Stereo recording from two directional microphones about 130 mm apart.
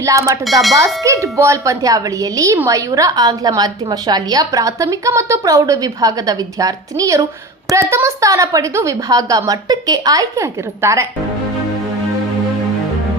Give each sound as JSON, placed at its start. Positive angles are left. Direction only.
{"t": 0.0, "sound": "a woman's voice", "side_deg": -25}